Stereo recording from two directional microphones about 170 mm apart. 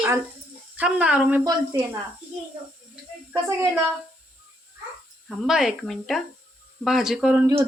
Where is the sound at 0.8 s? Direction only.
5° right (ahead or behind).